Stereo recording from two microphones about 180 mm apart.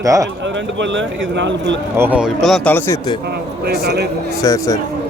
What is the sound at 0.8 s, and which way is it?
A man's voice, 90° right.